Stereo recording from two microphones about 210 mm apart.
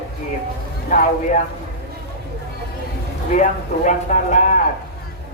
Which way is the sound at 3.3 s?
35° left (ahead or behind).